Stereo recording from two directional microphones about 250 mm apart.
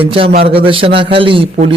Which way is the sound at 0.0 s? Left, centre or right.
Right.